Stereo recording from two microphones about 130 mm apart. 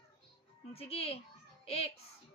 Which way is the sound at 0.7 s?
50° left (ahead or behind).